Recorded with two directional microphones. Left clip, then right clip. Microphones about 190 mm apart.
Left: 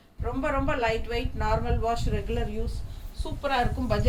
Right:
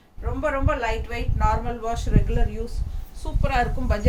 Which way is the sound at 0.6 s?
15° right (ahead or behind).